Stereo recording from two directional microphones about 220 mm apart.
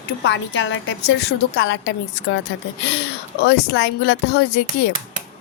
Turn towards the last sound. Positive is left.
turn(degrees=50)  # may be behind; listen again after turning